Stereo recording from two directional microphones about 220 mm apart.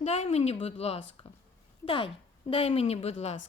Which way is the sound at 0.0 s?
30° left (ahead or behind).